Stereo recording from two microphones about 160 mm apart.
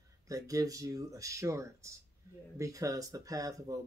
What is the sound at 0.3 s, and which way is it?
Speech, 20° right (ahead or behind).